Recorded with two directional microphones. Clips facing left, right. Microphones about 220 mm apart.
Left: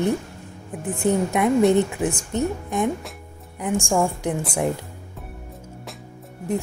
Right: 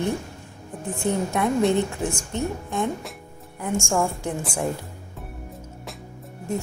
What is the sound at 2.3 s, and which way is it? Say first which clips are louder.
Speech: left 3 dB; 15° left (ahead or behind).